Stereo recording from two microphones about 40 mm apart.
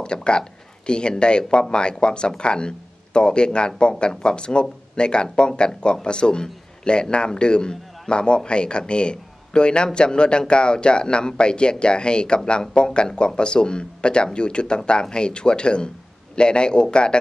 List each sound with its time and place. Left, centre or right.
0.0 s a man's voice: left